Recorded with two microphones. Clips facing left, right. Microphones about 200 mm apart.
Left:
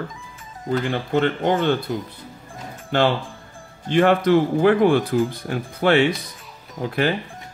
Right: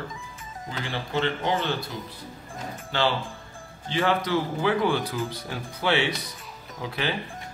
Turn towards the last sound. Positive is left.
turn(degrees=50)  # may be behind; listen again after turning